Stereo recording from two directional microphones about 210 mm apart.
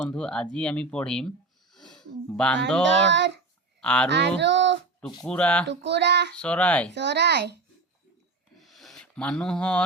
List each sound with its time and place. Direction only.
0.1 s speech: 5° left (ahead or behind)
1.7 s a sound: centre (ahead or behind)
2.8 s child singing: 60° right (ahead or behind)
3.8 s speech: 5° left (ahead or behind)
4.1 s speech: 55° right (ahead or behind)
5.2 s speech: 5° left (ahead or behind)
5.6 s child singing: 55° right (ahead or behind)
6.3 s speech: 5° left (ahead or behind)
6.9 s a child's voice: 55° right (ahead or behind)
8.6 s a sound: centre (ahead or behind)